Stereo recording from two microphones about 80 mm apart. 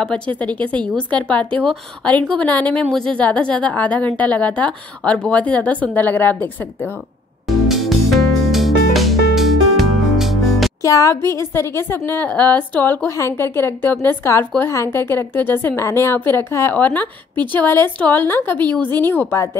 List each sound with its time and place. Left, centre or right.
0.0 s a woman's voice: centre
7.4 s music: centre
10.8 s a woman's voice: left
13.1 s a woman's voice: left
16.7 s a woman's voice: left